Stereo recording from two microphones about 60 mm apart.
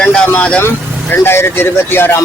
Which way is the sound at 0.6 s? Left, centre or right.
Left.